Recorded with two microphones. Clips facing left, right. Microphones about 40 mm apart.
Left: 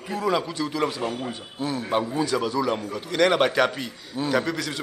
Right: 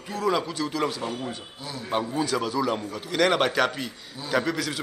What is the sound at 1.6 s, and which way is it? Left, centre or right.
Speech, left.